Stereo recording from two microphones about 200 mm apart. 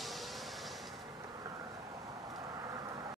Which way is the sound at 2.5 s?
15° right (ahead or behind).